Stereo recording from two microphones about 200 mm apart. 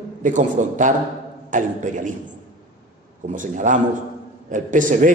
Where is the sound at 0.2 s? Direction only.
40° right (ahead or behind).